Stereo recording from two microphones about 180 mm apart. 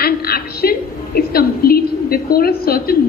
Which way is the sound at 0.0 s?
55° left (ahead or behind).